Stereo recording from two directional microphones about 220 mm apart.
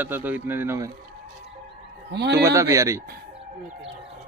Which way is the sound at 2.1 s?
50° right (ahead or behind).